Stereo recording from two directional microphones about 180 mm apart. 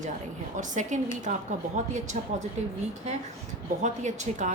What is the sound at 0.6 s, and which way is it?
A woman's voice, 45° right (ahead or behind).